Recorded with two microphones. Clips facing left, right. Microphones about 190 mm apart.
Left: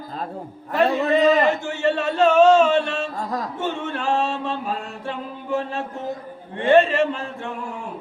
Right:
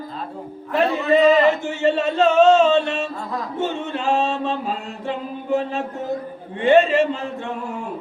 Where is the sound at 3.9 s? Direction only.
20° right (ahead or behind).